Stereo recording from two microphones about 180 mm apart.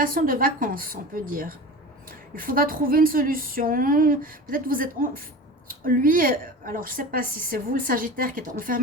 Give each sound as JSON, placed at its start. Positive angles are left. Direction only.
{"t": 0.0, "sound": "a woman's voice", "side_deg": -50}